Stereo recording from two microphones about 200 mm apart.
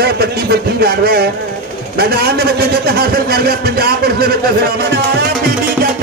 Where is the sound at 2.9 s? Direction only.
50° right (ahead or behind).